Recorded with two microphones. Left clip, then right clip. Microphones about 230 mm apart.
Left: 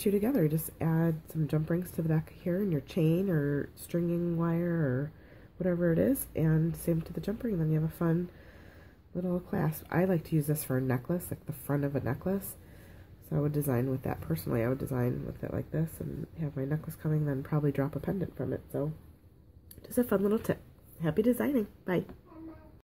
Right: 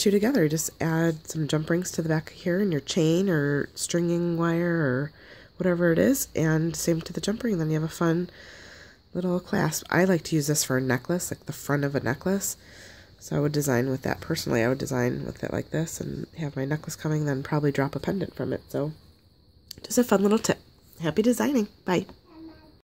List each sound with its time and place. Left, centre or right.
0.0 s speech: right